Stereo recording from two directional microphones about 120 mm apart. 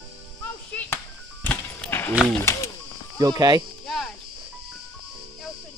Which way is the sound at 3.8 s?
Centre (ahead or behind).